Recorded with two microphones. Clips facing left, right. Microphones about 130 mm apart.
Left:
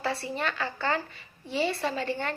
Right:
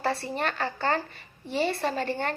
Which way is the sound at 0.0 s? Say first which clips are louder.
Right 2 dB; 50° right (ahead or behind).